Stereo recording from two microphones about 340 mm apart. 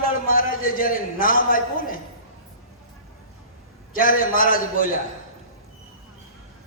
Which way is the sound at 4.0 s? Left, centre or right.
Left.